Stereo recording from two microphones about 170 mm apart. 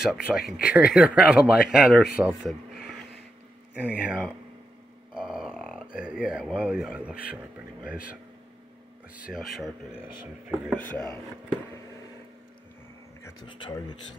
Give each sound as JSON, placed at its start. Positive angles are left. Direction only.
{"t": 0.0, "sound": "speech", "side_deg": 0}
{"t": 9.2, "sound": "speech", "side_deg": 0}
{"t": 10.8, "sound": "chopping", "side_deg": 5}
{"t": 13.5, "sound": "speech", "side_deg": 30}